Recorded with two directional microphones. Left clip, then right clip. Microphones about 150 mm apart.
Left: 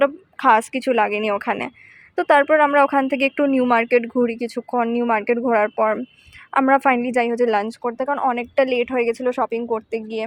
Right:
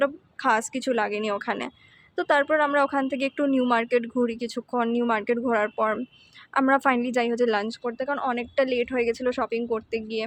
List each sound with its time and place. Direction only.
0.0 s a woman's voice: 30° left (ahead or behind)